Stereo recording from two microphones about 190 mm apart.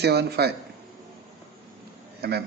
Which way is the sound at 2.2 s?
60° right (ahead or behind).